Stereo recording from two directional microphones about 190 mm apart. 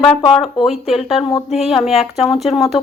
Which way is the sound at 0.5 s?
Centre (ahead or behind).